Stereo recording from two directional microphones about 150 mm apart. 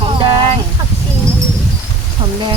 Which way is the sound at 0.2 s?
30° right (ahead or behind).